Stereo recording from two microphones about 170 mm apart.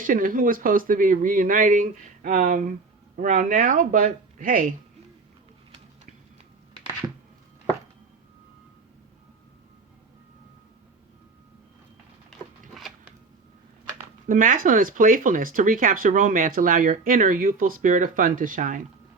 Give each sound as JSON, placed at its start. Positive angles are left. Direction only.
{"t": 0.0, "sound": "speech", "side_deg": -55}
{"t": 12.3, "sound": "a sound", "side_deg": 0}
{"t": 14.3, "sound": "speech", "side_deg": -55}